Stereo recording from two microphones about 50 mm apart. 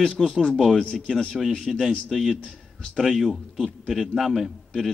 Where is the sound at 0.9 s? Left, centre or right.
Centre.